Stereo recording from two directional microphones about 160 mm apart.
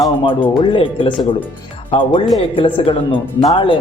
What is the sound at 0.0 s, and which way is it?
Speech, 30° left (ahead or behind).